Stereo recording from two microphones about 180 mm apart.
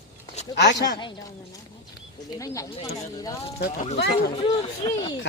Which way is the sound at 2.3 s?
20° left (ahead or behind).